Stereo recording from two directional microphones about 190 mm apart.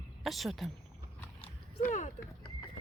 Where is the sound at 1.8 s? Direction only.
40° left (ahead or behind).